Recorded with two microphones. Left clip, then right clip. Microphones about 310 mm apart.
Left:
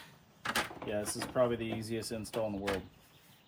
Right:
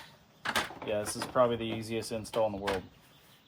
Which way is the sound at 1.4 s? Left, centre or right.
Centre.